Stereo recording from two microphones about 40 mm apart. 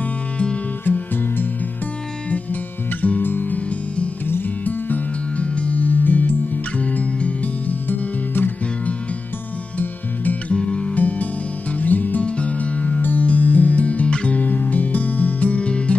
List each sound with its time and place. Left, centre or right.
1.1 s music: left
3.0 s guitar: left
3.5 s music: left
4.6 s music: left
5.4 s music: left
10.5 s music: left
11.0 s music: left
12.2 s music: left